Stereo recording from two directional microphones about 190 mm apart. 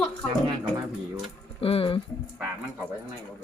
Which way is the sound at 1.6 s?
30° left (ahead or behind).